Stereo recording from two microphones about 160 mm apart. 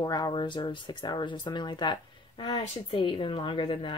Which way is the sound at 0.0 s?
25° left (ahead or behind).